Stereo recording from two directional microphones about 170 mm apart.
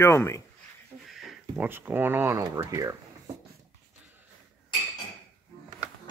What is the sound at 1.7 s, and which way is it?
Speech, 10° right (ahead or behind).